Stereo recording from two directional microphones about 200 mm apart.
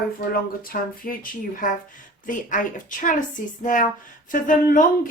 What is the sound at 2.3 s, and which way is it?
A woman's voice, 40° left (ahead or behind).